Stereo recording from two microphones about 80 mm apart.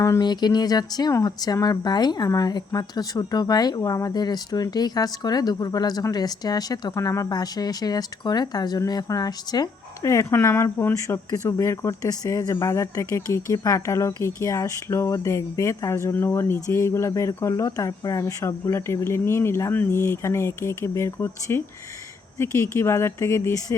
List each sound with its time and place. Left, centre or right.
0.2 s speech: left
6.9 s speech: left
10.0 s speech: left